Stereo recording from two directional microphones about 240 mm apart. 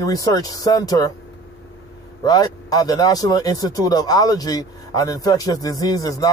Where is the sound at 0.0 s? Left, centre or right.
Centre.